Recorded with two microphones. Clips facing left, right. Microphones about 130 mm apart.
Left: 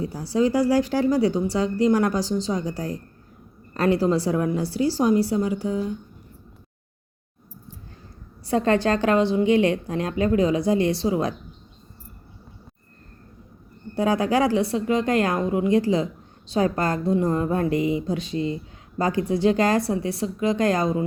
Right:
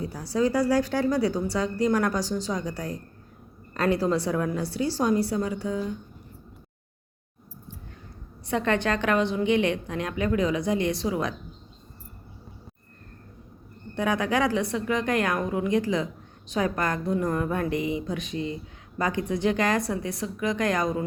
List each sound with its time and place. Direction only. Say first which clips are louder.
0.0 s a woman's voice: left 3 dB; 30° left (ahead or behind)
8.4 s a woman's voice: left 5 dB; 35° left (ahead or behind)
13.9 s a woman's voice: left 4 dB; 30° left (ahead or behind)